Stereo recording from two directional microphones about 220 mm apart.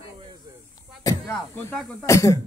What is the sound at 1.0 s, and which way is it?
Speech, 10° left (ahead or behind).